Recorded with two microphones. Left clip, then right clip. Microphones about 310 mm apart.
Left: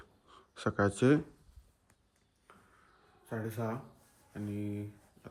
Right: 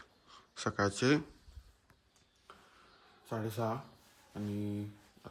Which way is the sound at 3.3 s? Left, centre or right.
Centre.